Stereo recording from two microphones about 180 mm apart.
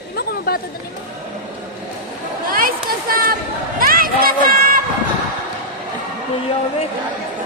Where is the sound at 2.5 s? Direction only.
55° right (ahead or behind).